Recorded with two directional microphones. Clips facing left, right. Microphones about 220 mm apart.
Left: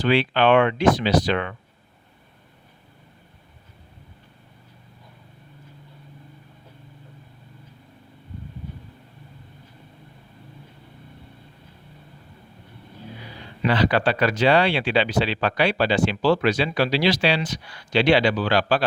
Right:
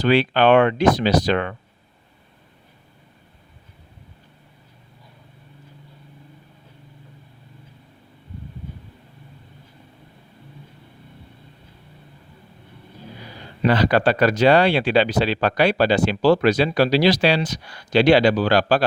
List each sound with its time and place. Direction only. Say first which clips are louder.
0.0 s speech: right 3 dB; 40° right (ahead or behind)
13.6 s speech: right 3 dB; 40° right (ahead or behind)